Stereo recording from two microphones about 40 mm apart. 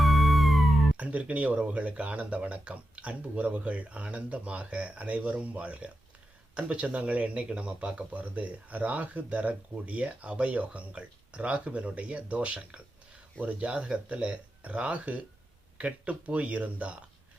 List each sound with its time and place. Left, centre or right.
0.0 s music: centre
1.2 s speech: right